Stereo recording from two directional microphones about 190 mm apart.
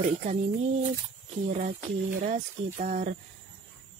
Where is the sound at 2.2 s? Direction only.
40° right (ahead or behind).